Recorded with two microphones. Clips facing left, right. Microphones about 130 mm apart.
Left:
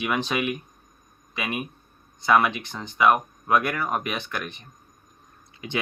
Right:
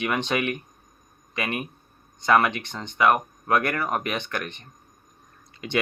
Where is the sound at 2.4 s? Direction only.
65° right (ahead or behind).